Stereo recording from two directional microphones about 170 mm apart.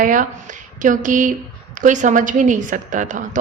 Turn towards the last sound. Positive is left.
turn(degrees=-50)  # may be behind; listen again after turning